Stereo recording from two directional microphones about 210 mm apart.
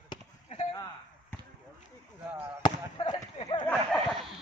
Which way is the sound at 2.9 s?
20° left (ahead or behind).